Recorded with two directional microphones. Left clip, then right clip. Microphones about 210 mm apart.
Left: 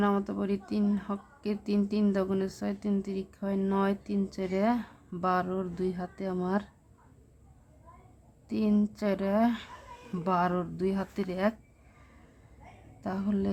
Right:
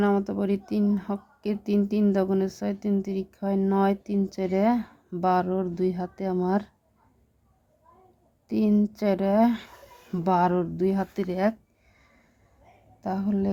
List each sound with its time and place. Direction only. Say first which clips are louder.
0.0 s speech: right 5 dB; 30° right (ahead or behind)
8.4 s speech: right 5 dB; 30° right (ahead or behind)
13.0 s speech: right 4 dB; 30° right (ahead or behind)